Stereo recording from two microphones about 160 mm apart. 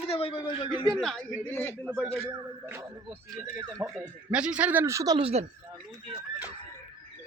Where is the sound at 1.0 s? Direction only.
5° left (ahead or behind).